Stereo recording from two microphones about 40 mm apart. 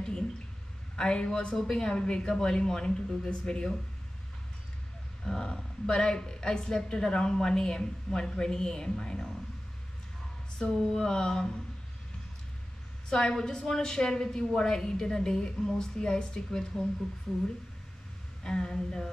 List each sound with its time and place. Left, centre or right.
0.9 s a woman's voice: left
5.2 s a woman's voice: centre
10.7 s a woman's voice: centre
13.1 s a woman's voice: centre
18.4 s a woman's voice: centre